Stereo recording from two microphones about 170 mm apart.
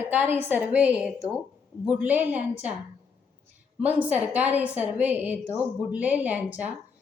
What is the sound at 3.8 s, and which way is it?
A woman's voice, 10° right (ahead or behind).